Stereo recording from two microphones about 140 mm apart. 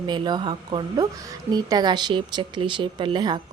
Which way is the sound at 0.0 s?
30° right (ahead or behind).